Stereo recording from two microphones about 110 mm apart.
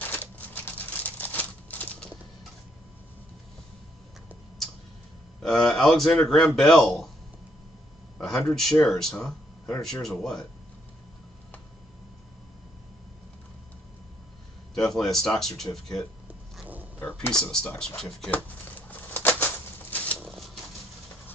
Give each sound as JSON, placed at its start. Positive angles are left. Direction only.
{"t": 0.1, "sound": "a sound", "side_deg": 15}
{"t": 5.4, "sound": "a man's voice", "side_deg": 5}
{"t": 8.2, "sound": "speech", "side_deg": 5}
{"t": 14.7, "sound": "a man's voice", "side_deg": 5}
{"t": 17.3, "sound": "a man's voice", "side_deg": 5}
{"t": 18.3, "sound": "a sound", "side_deg": 15}